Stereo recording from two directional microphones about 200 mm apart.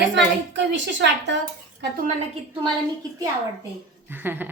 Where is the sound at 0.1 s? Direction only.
60° right (ahead or behind).